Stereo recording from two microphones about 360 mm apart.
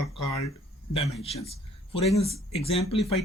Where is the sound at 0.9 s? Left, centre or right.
Centre.